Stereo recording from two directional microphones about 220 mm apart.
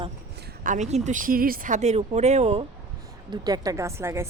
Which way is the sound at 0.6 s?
35° right (ahead or behind).